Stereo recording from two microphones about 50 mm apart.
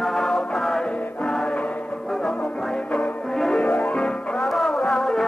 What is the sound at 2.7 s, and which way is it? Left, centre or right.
Music, left.